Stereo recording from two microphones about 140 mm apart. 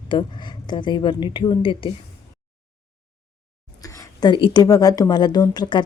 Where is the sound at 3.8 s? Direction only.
30° left (ahead or behind).